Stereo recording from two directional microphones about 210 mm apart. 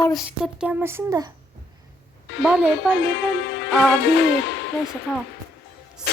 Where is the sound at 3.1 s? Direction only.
55° left (ahead or behind).